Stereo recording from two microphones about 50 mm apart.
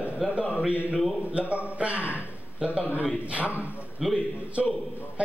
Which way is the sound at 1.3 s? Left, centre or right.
Right.